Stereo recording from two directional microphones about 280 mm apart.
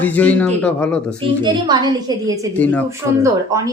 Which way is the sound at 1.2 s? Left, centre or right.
Centre.